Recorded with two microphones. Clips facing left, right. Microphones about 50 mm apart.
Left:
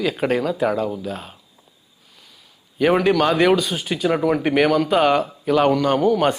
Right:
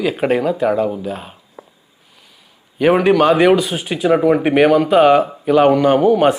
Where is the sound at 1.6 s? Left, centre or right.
Right.